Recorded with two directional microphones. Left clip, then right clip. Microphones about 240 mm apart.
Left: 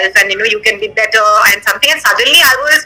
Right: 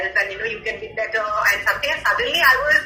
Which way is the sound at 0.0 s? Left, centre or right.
Left.